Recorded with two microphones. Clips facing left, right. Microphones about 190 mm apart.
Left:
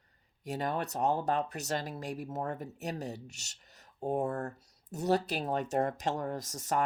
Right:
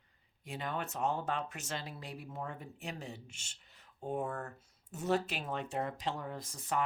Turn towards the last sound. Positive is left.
turn(degrees=40)  # may be behind; listen again after turning